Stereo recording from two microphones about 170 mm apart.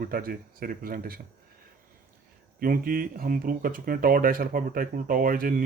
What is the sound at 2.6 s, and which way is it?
Speech, 60° right (ahead or behind).